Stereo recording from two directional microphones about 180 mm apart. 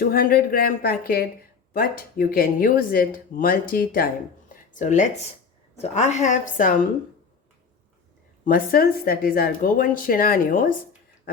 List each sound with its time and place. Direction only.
0.0 s speech: 55° left (ahead or behind)
8.4 s speech: 55° left (ahead or behind)